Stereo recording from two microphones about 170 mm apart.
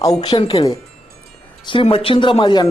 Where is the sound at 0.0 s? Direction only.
20° left (ahead or behind).